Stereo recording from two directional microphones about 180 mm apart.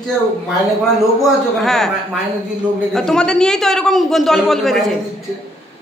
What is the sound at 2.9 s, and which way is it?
A man's voice, 5° left (ahead or behind).